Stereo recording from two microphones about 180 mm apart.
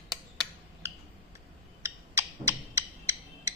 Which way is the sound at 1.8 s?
15° right (ahead or behind).